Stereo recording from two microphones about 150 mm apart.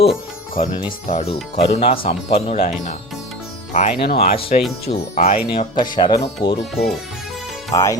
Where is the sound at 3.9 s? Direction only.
85° left.